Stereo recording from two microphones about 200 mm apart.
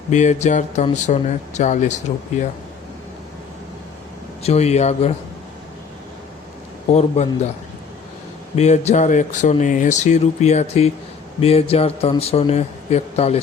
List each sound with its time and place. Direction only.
0.1 s speech: 35° left (ahead or behind)
4.4 s speech: 30° left (ahead or behind)
7.2 s speech: 35° left (ahead or behind)
8.5 s speech: 35° left (ahead or behind)